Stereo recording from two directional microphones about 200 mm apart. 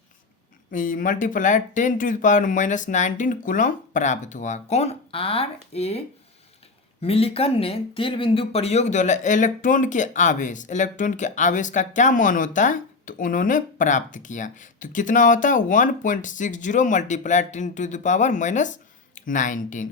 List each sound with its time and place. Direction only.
0.7 s speech: 40° left (ahead or behind)
7.0 s speech: 30° left (ahead or behind)